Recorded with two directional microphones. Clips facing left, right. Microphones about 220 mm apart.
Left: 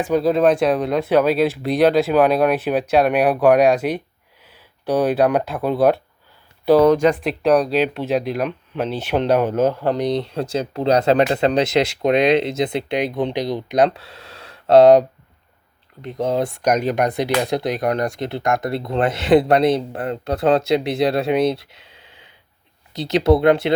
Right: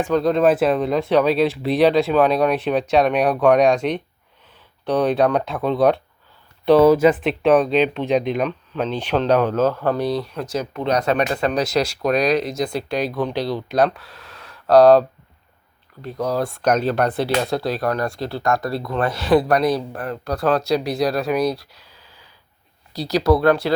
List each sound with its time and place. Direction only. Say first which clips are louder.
0.0 s speech: left 1 dB; 5° left (ahead or behind); by 23.7 s 20° left (ahead or behind)